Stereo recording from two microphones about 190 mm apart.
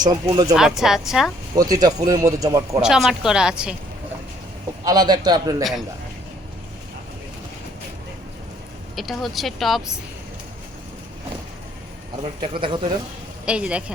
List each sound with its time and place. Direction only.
0.0 s a man's voice: 20° right (ahead or behind)
0.5 s speech: centre (ahead or behind)
1.5 s a man's voice: 20° right (ahead or behind)
2.8 s speech: centre (ahead or behind)
4.9 s a man's voice: 20° right (ahead or behind)
9.0 s speech: centre (ahead or behind)
12.2 s a man's voice: 30° right (ahead or behind)
13.4 s speech: 5° right (ahead or behind)